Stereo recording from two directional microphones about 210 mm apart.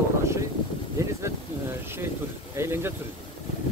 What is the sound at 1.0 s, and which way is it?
Speech, 15° right (ahead or behind).